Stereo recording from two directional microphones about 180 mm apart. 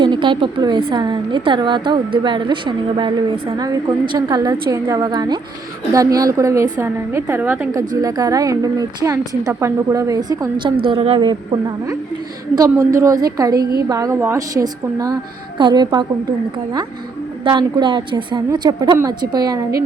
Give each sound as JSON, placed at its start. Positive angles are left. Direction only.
{"t": 0.0, "sound": "a woman's voice", "side_deg": -25}
{"t": 12.5, "sound": "a woman's voice", "side_deg": -20}
{"t": 17.4, "sound": "a woman's voice", "side_deg": -25}